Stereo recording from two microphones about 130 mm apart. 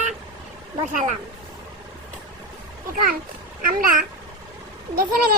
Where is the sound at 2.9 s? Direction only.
90° right.